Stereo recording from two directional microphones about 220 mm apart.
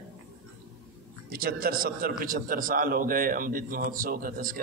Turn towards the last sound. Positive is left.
turn(degrees=-40)  # may be behind; listen again after turning